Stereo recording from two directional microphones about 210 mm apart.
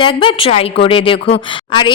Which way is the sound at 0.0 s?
25° left (ahead or behind).